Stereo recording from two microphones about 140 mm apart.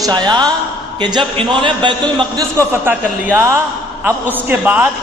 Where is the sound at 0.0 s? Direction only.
30° right (ahead or behind).